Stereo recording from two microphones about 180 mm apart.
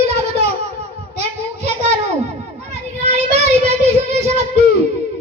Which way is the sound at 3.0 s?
40° right (ahead or behind).